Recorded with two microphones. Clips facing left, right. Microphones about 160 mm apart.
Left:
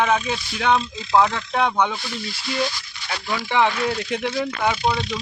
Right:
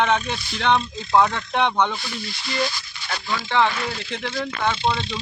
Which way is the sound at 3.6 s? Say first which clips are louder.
Left 2 dB; 15° left (ahead or behind).